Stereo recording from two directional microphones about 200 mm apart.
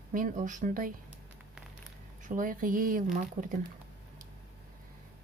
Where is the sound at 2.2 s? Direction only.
40° right (ahead or behind).